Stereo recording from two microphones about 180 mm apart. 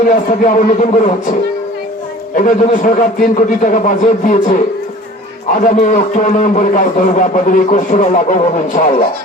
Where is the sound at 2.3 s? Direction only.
50° left (ahead or behind).